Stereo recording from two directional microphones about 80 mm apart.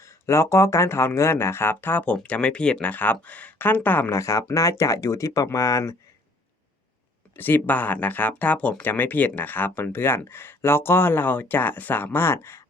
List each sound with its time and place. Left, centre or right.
0.0 s speech: left
2.1 s speech: centre
2.9 s speech: left
4.1 s speech: left
7.3 s speech: left